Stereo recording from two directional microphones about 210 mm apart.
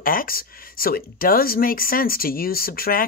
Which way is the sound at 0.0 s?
40° left (ahead or behind).